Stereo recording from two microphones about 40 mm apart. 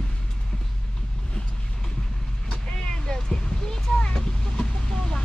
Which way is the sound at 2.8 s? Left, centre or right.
Centre.